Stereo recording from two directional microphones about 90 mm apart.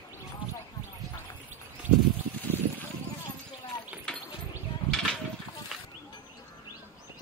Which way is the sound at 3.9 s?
10° right (ahead or behind).